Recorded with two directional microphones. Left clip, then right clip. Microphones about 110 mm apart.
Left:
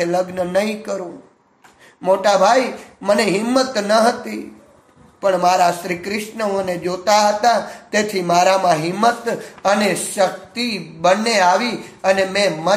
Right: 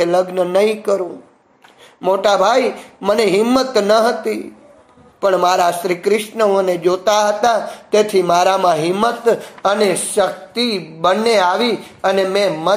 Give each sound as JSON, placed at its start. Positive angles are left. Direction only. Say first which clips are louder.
{"t": 0.0, "sound": "speech", "louder": "right 4 dB", "side_deg": -25}